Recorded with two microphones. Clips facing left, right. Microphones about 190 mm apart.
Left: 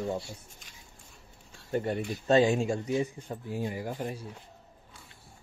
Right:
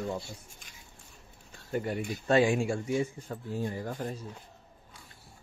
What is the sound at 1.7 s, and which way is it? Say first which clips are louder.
Speech: left 2 dB; 30° left (ahead or behind).